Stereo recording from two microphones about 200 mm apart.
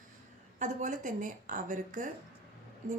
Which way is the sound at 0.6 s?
40° right (ahead or behind).